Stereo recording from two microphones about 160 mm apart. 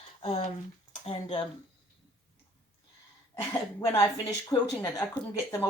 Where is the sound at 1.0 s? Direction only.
30° left (ahead or behind).